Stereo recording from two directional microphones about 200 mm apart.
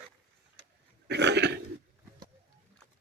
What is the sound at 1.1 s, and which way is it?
Burping, 60° right (ahead or behind).